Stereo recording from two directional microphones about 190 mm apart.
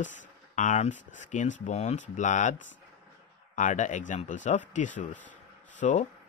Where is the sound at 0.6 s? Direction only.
40° left (ahead or behind).